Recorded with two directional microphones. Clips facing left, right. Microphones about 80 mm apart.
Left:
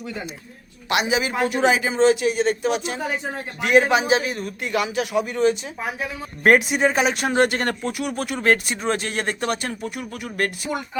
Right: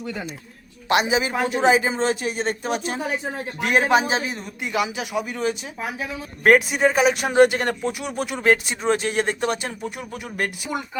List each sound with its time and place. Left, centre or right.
0.9 s a woman's voice: right
4.3 s speech: centre